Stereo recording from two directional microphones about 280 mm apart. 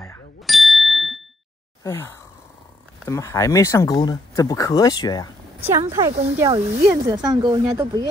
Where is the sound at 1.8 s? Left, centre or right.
Centre.